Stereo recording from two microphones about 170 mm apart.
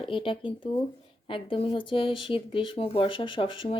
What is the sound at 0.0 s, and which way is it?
Speech, 30° left (ahead or behind).